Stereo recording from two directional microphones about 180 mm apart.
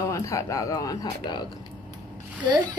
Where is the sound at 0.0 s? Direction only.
20° left (ahead or behind).